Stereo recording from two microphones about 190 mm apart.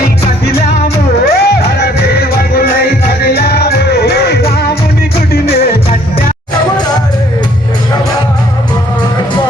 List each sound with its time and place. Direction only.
1.2 s music: 60° left (ahead or behind)